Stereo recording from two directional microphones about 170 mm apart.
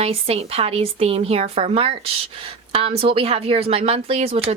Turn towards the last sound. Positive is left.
turn(degrees=-35)  # may be behind; listen again after turning